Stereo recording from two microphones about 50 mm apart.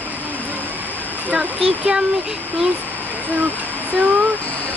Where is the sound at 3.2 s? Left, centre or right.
Right.